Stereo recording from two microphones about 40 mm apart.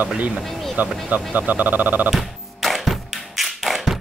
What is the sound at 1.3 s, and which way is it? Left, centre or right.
Speech, right.